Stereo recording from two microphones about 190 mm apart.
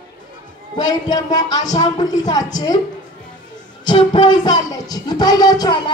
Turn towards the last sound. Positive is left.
turn(degrees=20)  # may be behind; listen again after turning